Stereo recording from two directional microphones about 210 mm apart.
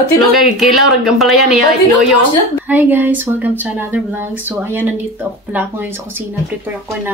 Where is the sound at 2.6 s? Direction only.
10° right (ahead or behind).